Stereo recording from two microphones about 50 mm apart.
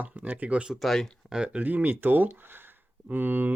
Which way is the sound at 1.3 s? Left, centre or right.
Right.